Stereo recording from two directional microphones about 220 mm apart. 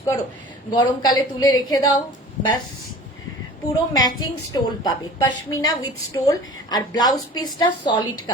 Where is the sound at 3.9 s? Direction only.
20° left (ahead or behind).